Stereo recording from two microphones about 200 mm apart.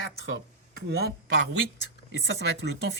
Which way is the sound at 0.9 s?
55° right (ahead or behind).